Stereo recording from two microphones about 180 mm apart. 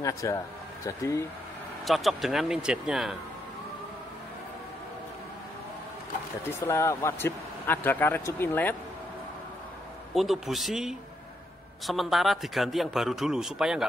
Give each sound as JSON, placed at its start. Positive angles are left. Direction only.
{"t": 0.0, "sound": "speech", "side_deg": 20}
{"t": 1.9, "sound": "a man's voice", "side_deg": 0}
{"t": 6.6, "sound": "speech", "side_deg": 15}
{"t": 10.1, "sound": "a man's voice", "side_deg": 0}